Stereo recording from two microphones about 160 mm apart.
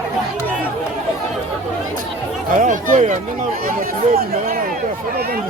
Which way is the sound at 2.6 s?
55° right (ahead or behind).